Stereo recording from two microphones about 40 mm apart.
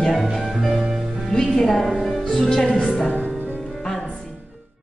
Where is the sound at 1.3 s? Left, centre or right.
Centre.